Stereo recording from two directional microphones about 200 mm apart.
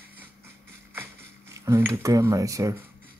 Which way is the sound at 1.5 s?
15° right (ahead or behind).